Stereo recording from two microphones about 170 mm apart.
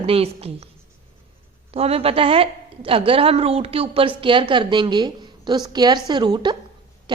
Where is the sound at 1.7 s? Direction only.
35° right (ahead or behind).